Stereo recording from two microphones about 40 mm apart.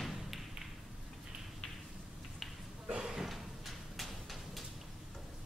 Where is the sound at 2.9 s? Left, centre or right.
Centre.